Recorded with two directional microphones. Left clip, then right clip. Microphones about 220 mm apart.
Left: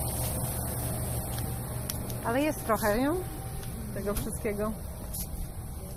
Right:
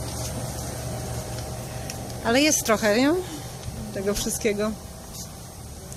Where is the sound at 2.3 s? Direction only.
45° right (ahead or behind).